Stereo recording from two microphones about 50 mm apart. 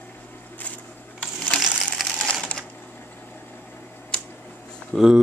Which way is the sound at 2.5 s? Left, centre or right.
Left.